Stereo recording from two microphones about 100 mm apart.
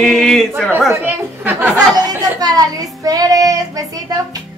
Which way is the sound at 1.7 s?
40° right (ahead or behind).